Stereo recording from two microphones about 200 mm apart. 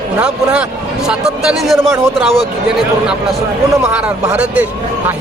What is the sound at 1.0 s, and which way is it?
Speech, 5° right (ahead or behind).